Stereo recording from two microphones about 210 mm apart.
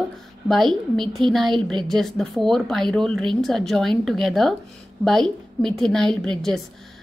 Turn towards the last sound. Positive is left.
turn(degrees=0)  # may be behind; listen again after turning